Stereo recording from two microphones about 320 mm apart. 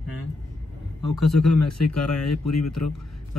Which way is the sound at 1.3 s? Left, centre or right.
Left.